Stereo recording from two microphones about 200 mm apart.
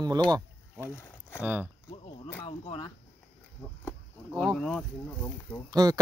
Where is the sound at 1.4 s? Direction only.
10° right (ahead or behind).